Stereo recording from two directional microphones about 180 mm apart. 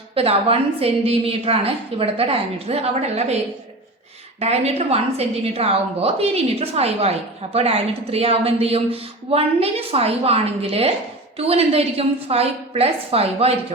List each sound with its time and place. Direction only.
0.1 s a woman's voice: 35° right (ahead or behind)
4.4 s a woman's voice: 35° right (ahead or behind)